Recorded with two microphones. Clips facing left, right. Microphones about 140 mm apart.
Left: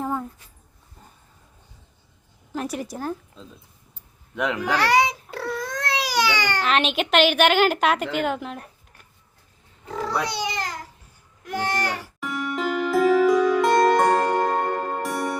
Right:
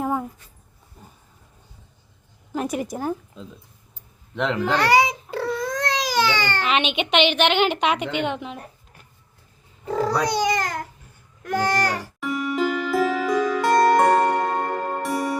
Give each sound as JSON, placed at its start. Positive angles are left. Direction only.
{"t": 0.0, "sound": "a sound", "side_deg": -10}
{"t": 2.5, "sound": "a sound", "side_deg": -5}
{"t": 3.0, "sound": "speech", "side_deg": -10}
{"t": 4.4, "sound": "babbling", "side_deg": 10}
{"t": 6.6, "sound": "a woman's voice", "side_deg": 0}
{"t": 10.2, "sound": "babbling", "side_deg": -45}
{"t": 11.4, "sound": "speech", "side_deg": -40}
{"t": 12.2, "sound": "music", "side_deg": 0}